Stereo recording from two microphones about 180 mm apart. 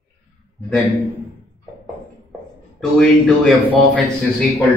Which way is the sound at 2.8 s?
Centre (ahead or behind).